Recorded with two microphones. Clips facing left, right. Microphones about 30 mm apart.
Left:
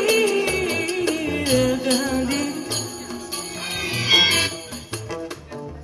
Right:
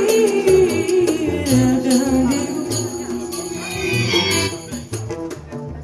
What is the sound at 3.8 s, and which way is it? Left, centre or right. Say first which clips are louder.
Music: left 1 dB; centre.